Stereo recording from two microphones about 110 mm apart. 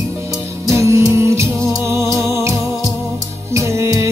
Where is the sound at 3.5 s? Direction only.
25° right (ahead or behind).